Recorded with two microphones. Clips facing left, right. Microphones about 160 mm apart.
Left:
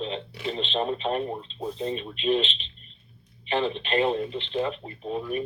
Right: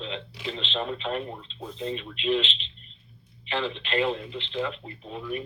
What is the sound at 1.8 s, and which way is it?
Speech, 35° left (ahead or behind).